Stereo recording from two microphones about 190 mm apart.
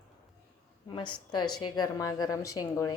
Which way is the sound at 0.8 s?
25° left (ahead or behind).